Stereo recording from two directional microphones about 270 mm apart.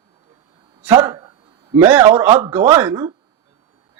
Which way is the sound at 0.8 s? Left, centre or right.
Centre.